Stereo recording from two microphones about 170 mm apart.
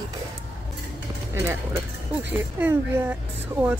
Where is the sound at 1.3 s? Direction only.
15° right (ahead or behind).